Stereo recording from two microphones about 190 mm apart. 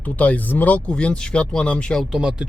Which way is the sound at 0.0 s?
10° left (ahead or behind).